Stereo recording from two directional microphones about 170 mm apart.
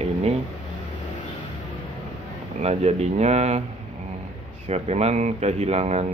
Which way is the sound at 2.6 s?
40° right (ahead or behind).